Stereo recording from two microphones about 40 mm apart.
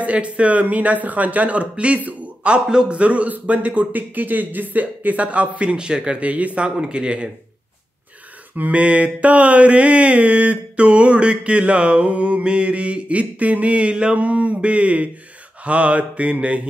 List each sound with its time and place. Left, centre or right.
0.0 s mantra: right
5.7 s speech: right
8.5 s mantra: right
8.8 s mantra: right
14.2 s mantra: right